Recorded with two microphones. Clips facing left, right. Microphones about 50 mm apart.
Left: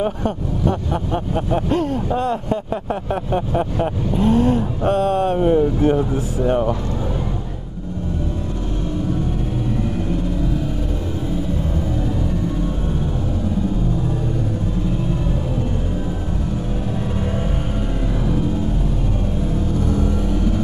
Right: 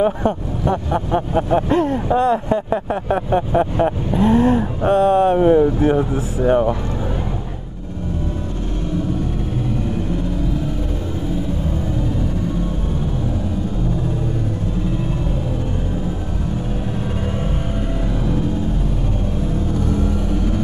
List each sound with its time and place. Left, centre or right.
0.0 s speech: centre
1.7 s speech: right; by 3.9 s centre
4.1 s speech: right
6.1 s speech: right